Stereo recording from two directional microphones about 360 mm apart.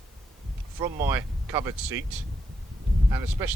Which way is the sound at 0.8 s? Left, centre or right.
Centre.